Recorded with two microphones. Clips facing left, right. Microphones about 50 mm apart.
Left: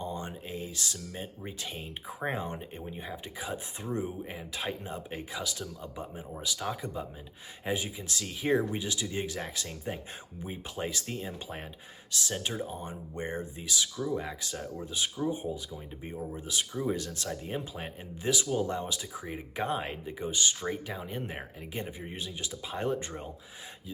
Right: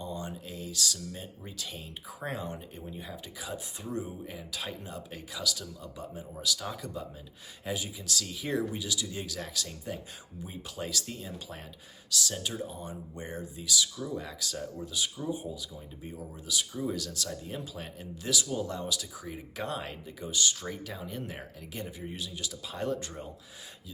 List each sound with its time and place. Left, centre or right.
0.0 s a sound: left
1.1 s speech: left
13.9 s speech: centre
14.2 s speech: left